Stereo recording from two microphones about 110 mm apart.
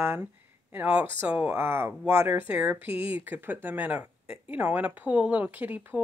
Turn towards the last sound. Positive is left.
turn(degrees=-15)  # may be behind; listen again after turning